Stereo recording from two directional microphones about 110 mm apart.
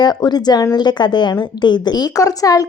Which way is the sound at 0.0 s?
40° left (ahead or behind).